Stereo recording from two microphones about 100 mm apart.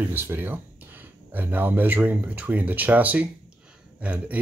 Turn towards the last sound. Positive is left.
turn(degrees=-15)  # may be behind; listen again after turning